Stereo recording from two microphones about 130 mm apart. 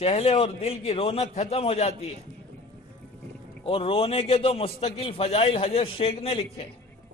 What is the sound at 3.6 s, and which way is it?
A man's voice, 45° left (ahead or behind).